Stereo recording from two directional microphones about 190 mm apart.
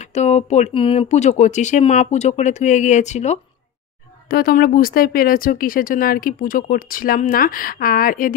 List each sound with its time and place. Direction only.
0.0 s speech: 35° left (ahead or behind)
4.3 s speech: 50° left (ahead or behind)